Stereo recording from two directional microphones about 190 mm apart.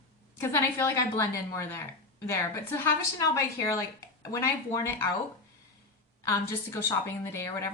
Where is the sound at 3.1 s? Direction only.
15° left (ahead or behind).